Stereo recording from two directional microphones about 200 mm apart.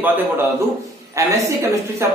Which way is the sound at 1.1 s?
15° right (ahead or behind).